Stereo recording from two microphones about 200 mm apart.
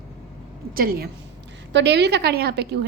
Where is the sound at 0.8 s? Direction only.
45° right (ahead or behind).